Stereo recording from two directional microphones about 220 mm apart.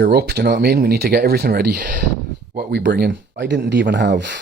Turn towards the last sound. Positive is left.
turn(degrees=-50)  # may be behind; listen again after turning